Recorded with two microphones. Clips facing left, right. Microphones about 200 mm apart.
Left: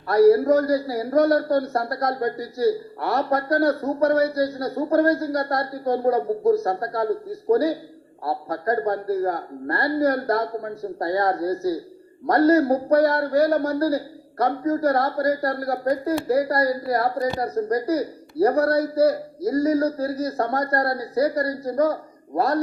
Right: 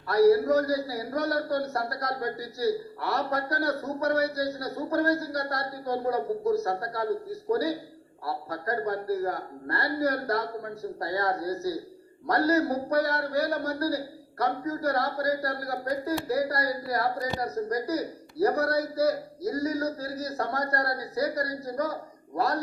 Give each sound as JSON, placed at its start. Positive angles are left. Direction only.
{"t": 0.1, "sound": "a man's voice", "side_deg": 50}
{"t": 8.2, "sound": "a man's voice", "side_deg": 50}